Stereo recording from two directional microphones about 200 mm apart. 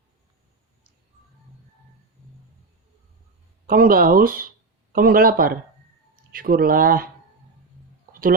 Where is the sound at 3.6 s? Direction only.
45° right (ahead or behind).